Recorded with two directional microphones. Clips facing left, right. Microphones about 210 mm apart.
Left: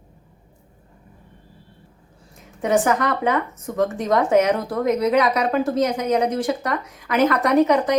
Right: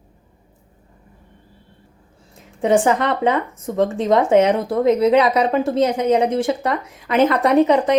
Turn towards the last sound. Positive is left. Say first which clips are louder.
# right 2 dB
turn(degrees=-25)  # may be behind; listen again after turning